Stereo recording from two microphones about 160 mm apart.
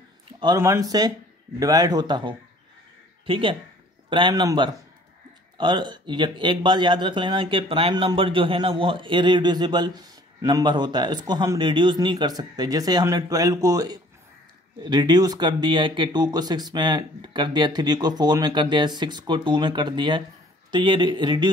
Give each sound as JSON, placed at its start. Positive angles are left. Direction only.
{"t": 0.6, "sound": "speech", "side_deg": -20}